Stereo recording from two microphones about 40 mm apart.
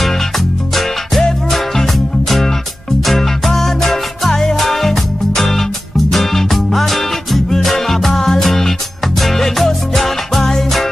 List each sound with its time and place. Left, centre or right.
1.5 s music: centre